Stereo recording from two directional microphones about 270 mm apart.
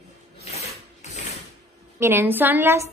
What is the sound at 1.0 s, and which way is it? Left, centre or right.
Mechanisms, left.